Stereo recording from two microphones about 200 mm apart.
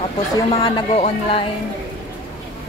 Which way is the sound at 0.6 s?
30° left (ahead or behind).